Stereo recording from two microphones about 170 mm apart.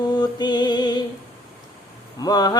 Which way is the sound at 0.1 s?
25° left (ahead or behind).